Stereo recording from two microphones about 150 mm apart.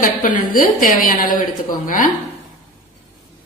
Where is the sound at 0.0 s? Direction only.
65° left (ahead or behind).